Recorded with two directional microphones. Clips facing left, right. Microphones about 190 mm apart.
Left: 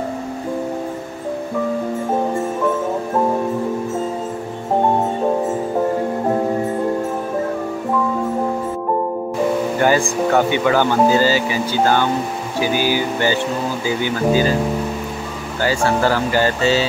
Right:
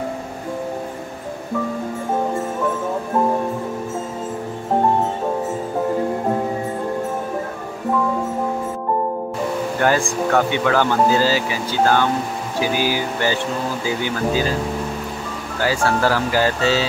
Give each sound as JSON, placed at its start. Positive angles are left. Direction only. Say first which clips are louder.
{"t": 9.8, "sound": "speech", "louder": "even", "side_deg": 5}
{"t": 15.6, "sound": "speech", "louder": "left 2 dB", "side_deg": 0}